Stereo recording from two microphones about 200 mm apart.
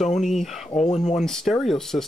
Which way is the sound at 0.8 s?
35° left (ahead or behind).